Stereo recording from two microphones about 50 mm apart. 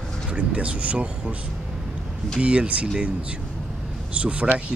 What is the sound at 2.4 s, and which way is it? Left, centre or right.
Speech, right.